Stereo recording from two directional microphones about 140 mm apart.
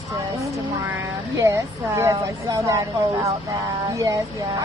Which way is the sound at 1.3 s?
20° right (ahead or behind).